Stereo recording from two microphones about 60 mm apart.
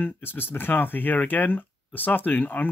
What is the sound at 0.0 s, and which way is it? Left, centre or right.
Speech, left.